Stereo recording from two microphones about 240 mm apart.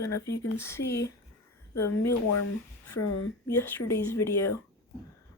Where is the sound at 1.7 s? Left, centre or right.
Left.